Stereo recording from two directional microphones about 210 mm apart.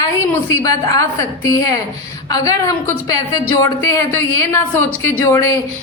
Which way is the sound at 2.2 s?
15° left (ahead or behind).